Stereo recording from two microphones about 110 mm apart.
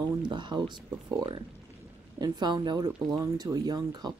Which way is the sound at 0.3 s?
45° right (ahead or behind).